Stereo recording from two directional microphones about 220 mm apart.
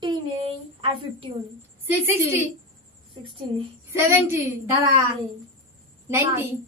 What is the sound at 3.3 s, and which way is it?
Speech, 25° right (ahead or behind).